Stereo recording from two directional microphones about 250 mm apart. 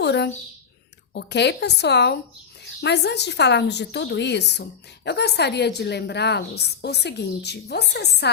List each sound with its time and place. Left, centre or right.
0.0 s a child's voice: left